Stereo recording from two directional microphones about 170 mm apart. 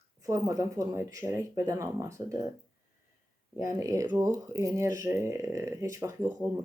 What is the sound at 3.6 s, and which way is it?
Speech, 15° right (ahead or behind).